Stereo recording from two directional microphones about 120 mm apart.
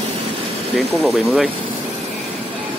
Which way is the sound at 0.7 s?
Centre (ahead or behind).